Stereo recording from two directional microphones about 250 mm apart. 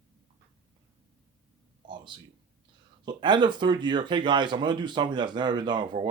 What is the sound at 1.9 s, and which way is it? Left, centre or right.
Speech, centre.